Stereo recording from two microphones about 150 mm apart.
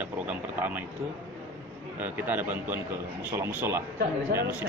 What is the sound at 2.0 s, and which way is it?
A man's voice, 10° right (ahead or behind).